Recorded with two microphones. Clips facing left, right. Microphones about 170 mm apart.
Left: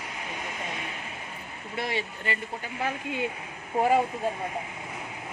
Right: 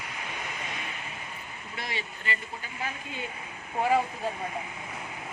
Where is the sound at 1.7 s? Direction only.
55° left (ahead or behind).